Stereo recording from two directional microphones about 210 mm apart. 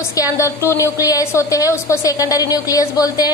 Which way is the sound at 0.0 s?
15° left (ahead or behind).